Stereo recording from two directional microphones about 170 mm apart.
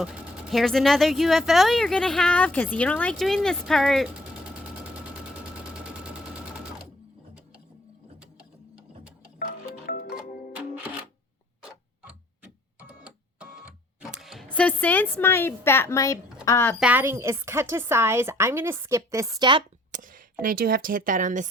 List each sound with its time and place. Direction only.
0.0 s speech: centre (ahead or behind)
9.8 s music: 55° left (ahead or behind)
12.9 s printer: 5° right (ahead or behind)
14.1 s speech: centre (ahead or behind); by 16.7 s 15° left (ahead or behind)
16.8 s a woman's voice: 10° right (ahead or behind); by 19.6 s 25° right (ahead or behind)
19.9 s speech: 50° right (ahead or behind)